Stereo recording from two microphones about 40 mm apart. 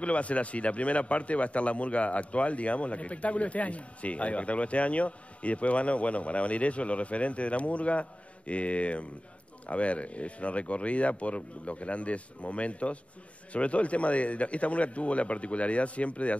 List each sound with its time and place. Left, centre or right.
0.0 s speech: left